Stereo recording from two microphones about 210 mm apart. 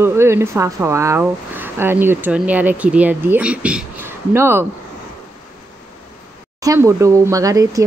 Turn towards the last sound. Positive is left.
turn(degrees=-15)  # may be behind; listen again after turning